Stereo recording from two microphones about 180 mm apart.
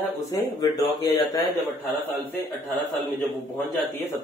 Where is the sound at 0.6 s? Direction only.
20° left (ahead or behind).